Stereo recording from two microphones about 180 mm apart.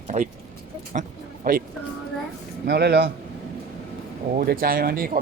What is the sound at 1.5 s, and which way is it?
Speech, 55° right (ahead or behind).